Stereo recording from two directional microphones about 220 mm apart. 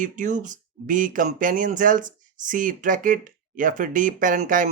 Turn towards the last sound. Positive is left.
turn(degrees=-35)  # may be behind; listen again after turning